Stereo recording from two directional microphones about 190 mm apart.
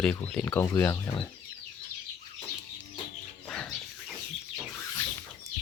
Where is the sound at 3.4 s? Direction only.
5° left (ahead or behind).